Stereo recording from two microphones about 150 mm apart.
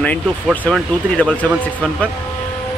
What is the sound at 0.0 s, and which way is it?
Speech, 5° left (ahead or behind).